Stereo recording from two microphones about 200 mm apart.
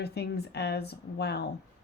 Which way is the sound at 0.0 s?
55° left (ahead or behind).